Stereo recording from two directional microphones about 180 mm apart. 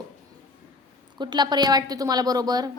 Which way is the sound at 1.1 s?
25° right (ahead or behind).